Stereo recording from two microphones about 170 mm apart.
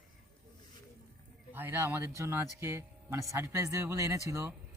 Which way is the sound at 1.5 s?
10° right (ahead or behind).